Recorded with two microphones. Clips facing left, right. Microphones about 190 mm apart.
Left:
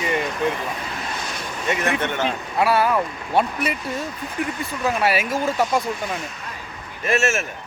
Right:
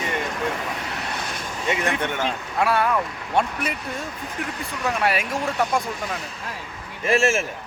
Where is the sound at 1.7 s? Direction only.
15° right (ahead or behind).